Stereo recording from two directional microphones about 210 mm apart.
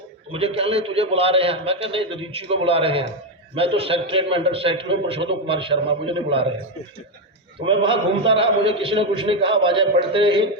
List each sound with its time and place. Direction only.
0.3 s a man's voice: 25° right (ahead or behind)
7.6 s a man's voice: 25° right (ahead or behind)